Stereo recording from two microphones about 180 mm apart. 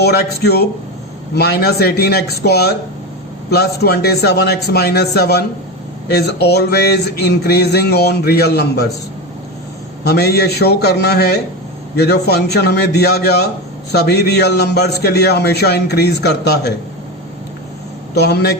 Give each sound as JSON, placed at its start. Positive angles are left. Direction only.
{"t": 0.0, "sound": "speech", "side_deg": 65}
{"t": 10.0, "sound": "speech", "side_deg": 65}
{"t": 18.1, "sound": "speech", "side_deg": 65}